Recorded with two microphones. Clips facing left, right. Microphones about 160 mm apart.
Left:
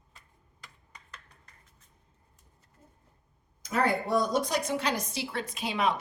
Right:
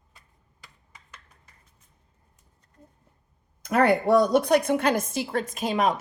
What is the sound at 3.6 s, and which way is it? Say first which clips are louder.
A woman's voice: right 8 dB; 65° right (ahead or behind).